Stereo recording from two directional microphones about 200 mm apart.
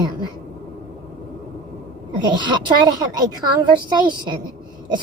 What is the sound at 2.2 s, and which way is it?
A woman's voice, 20° right (ahead or behind).